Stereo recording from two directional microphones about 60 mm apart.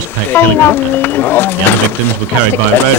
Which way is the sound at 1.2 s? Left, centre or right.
Left.